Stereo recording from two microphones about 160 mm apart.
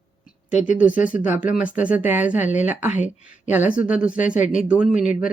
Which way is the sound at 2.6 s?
10° right (ahead or behind).